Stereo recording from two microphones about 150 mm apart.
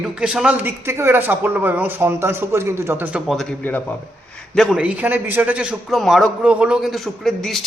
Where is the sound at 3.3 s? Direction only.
5° left (ahead or behind).